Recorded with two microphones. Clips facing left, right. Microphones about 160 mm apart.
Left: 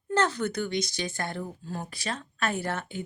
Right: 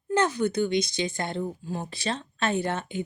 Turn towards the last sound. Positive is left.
turn(degrees=-20)  # may be behind; listen again after turning